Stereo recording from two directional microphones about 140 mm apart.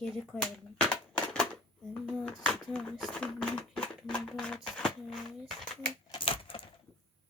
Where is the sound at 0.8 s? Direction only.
10° left (ahead or behind).